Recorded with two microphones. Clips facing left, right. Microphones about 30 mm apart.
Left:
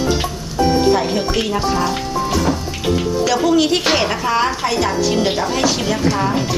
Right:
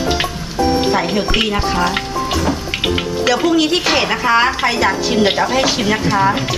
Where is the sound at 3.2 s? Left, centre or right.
Centre.